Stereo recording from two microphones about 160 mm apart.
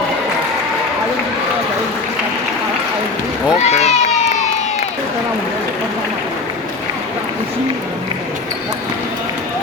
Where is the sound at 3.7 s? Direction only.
45° left (ahead or behind).